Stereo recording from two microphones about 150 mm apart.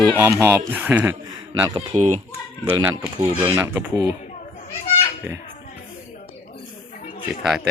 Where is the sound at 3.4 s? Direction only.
15° right (ahead or behind).